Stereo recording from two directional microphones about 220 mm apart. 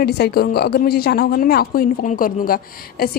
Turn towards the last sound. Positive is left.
turn(degrees=40)  # may be behind; listen again after turning